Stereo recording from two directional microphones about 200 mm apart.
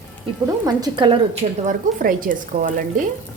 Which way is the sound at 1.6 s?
40° right (ahead or behind).